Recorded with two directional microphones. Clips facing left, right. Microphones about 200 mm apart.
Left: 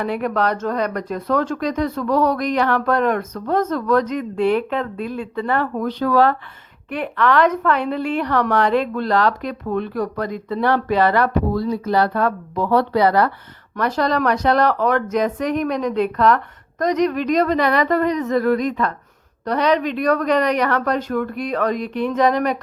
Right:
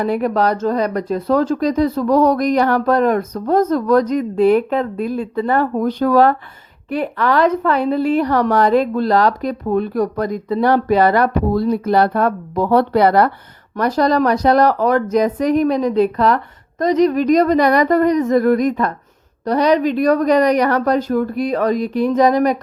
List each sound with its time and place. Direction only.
0.0 s speech: 35° right (ahead or behind)
13.7 s speech: 40° right (ahead or behind)